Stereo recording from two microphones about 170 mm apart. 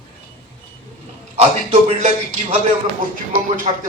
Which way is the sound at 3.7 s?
40° right (ahead or behind).